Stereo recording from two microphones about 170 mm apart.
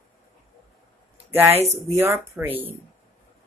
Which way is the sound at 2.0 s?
15° right (ahead or behind).